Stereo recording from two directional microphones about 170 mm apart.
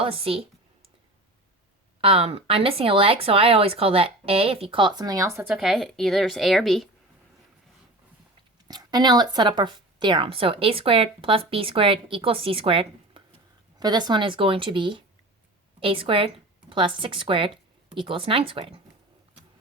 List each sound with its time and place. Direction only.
0.0 s speech: 35° right (ahead or behind)
2.0 s speech: 35° right (ahead or behind); by 6.8 s centre (ahead or behind)
8.6 s a woman's voice: 25° right (ahead or behind)